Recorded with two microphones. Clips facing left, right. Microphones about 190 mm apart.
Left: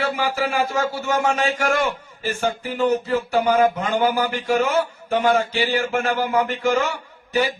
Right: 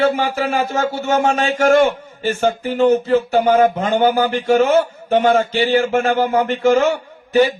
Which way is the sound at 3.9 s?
25° right (ahead or behind).